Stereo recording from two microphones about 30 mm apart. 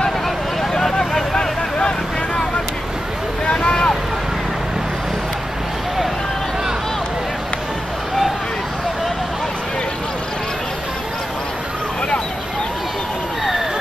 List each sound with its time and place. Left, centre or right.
0.6 s a sound: centre
0.9 s vehicle: left
3.4 s vehicle: left